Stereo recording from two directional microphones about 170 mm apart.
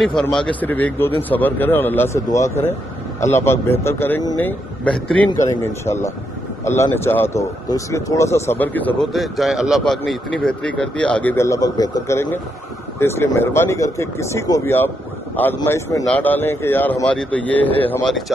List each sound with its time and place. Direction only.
0.0 s speech: 5° left (ahead or behind)
9.1 s speech: centre (ahead or behind)